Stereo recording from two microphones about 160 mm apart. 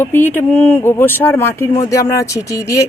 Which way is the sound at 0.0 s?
10° left (ahead or behind).